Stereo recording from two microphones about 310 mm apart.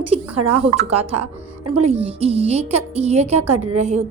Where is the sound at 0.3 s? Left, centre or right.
Right.